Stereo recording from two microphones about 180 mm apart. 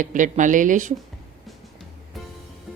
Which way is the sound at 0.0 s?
45° right (ahead or behind).